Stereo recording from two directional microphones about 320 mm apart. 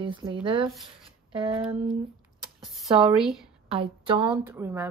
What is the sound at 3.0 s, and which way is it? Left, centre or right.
Speech, centre.